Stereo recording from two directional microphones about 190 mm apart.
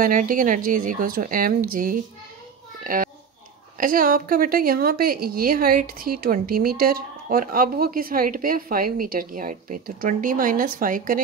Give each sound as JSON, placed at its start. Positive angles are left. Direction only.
{"t": 0.0, "sound": "a woman's voice", "side_deg": -45}
{"t": 2.8, "sound": "a sound", "side_deg": -45}
{"t": 3.7, "sound": "a woman's voice", "side_deg": -45}